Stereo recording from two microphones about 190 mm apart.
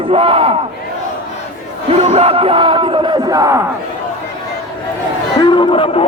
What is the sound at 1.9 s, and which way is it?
Speech, 30° right (ahead or behind).